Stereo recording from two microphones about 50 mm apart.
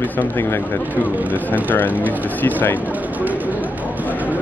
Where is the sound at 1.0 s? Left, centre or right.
Right.